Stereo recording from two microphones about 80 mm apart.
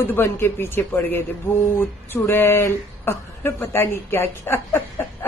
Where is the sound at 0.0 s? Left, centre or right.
Left.